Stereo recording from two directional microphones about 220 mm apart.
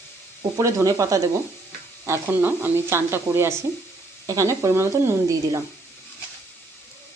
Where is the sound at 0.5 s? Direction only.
15° right (ahead or behind).